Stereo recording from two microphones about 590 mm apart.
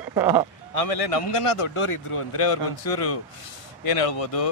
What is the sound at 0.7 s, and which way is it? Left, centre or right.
A man's voice, left.